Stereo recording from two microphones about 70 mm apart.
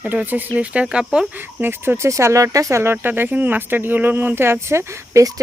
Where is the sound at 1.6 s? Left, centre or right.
Right.